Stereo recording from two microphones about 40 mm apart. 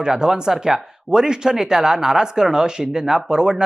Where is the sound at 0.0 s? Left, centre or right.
Centre.